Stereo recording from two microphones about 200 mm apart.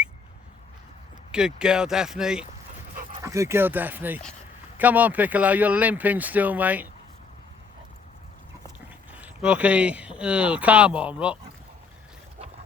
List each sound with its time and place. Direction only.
1.3 s speech: 5° right (ahead or behind)
2.9 s dog: 45° right (ahead or behind)
3.2 s speech: 15° right (ahead or behind)
9.1 s speech: 5° right (ahead or behind)